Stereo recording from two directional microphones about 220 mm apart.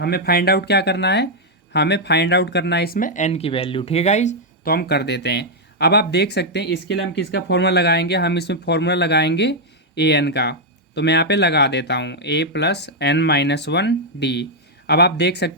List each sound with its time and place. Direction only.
0.0 s speech: 45° left (ahead or behind)